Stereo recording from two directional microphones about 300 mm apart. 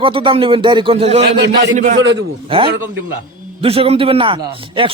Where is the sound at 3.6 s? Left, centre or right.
Centre.